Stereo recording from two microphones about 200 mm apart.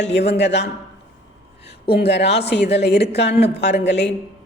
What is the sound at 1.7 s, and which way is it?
A woman's voice, 55° left (ahead or behind).